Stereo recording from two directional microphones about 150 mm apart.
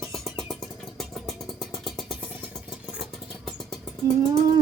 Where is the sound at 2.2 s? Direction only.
10° right (ahead or behind).